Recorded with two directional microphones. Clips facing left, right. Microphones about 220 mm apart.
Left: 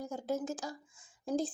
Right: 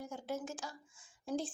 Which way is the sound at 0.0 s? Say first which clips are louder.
Left 5 dB; 40° left (ahead or behind).